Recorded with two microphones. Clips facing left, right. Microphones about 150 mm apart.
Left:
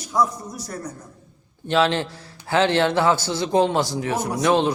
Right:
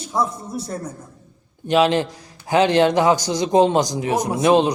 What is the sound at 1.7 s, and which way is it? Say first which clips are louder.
A man's voice: right 3 dB; 15° right (ahead or behind).